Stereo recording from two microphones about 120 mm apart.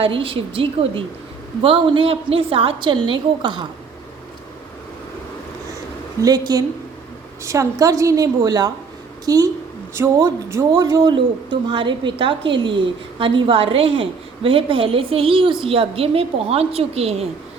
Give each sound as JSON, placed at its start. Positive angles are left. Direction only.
{"t": 0.0, "sound": "speech", "side_deg": -50}
{"t": 6.2, "sound": "a woman's voice", "side_deg": -30}